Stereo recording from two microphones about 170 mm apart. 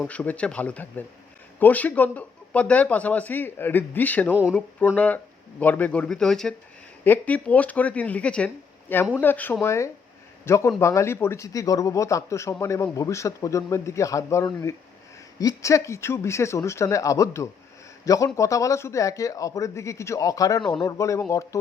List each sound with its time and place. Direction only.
0.0 s speech: 10° left (ahead or behind)